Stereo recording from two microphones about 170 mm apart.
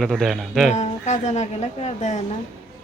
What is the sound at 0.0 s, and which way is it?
Speech, centre (ahead or behind).